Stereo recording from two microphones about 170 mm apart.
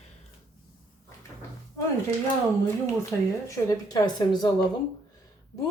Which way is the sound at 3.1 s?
15° left (ahead or behind).